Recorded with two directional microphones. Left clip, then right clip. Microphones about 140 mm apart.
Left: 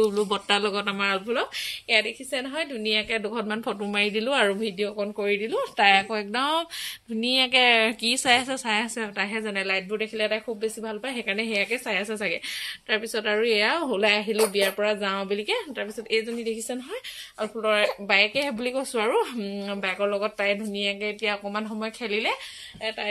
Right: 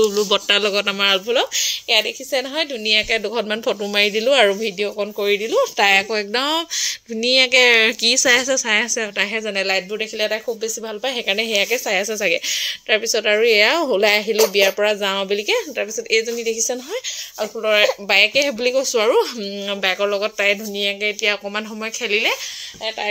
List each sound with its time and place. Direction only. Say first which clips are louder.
0.3 s a woman's voice: right 7 dB; 25° right (ahead or behind)
9.2 s a woman's voice: right 5 dB; 40° right (ahead or behind)
19.8 s a woman's voice: right 6 dB; 45° right (ahead or behind)